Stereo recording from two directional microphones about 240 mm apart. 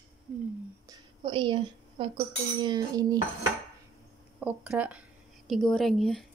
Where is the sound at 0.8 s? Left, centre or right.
Right.